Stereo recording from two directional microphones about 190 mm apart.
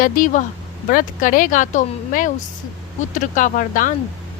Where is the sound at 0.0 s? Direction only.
45° left (ahead or behind).